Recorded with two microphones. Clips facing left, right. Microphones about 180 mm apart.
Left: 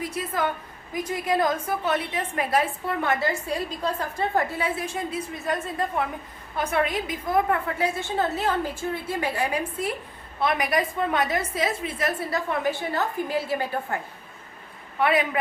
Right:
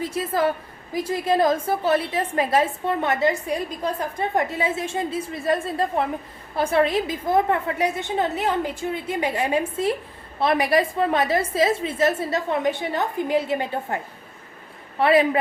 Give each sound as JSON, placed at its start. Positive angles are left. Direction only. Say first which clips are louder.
{"t": 0.0, "sound": "a woman's voice", "louder": "right 5 dB", "side_deg": -30}